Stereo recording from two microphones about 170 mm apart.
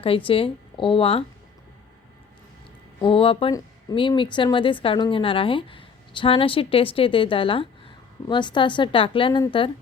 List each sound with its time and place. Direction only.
0.0 s a woman's voice: 30° left (ahead or behind)
3.0 s a woman's voice: 30° left (ahead or behind)